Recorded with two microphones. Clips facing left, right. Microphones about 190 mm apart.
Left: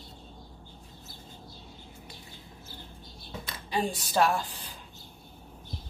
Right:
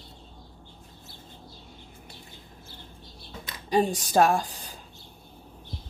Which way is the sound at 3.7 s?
45° right (ahead or behind).